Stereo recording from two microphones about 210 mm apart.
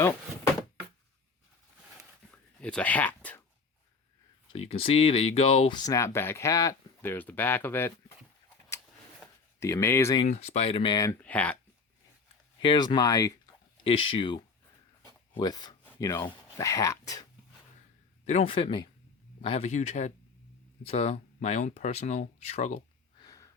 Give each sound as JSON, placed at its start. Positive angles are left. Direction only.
{"t": 2.0, "sound": "a sound", "side_deg": 5}
{"t": 4.5, "sound": "speech", "side_deg": 30}
{"t": 9.6, "sound": "speech", "side_deg": 15}
{"t": 10.2, "sound": "speech", "side_deg": 30}
{"t": 12.5, "sound": "speech", "side_deg": 20}
{"t": 13.8, "sound": "speech", "side_deg": 25}
{"t": 18.3, "sound": "speech", "side_deg": 30}
{"t": 23.2, "sound": "wheeze", "side_deg": 15}